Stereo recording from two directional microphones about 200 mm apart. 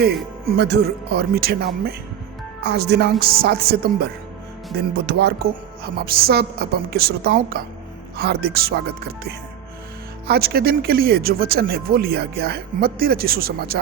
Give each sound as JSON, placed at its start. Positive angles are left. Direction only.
{"t": 0.5, "sound": "speech", "side_deg": -55}
{"t": 10.2, "sound": "speech", "side_deg": -50}